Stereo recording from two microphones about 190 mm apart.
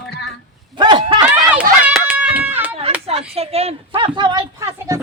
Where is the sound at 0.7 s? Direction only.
25° right (ahead or behind).